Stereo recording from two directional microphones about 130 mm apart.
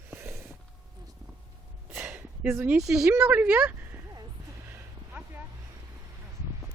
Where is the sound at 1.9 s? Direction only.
15° right (ahead or behind).